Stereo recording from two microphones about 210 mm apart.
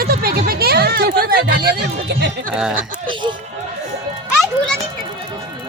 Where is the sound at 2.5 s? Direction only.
5° right (ahead or behind).